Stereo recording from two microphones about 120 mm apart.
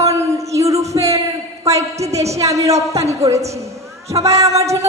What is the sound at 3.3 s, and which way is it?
Speech, 65° right (ahead or behind).